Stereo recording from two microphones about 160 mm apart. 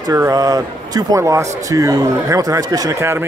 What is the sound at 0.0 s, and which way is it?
Speech, 20° right (ahead or behind).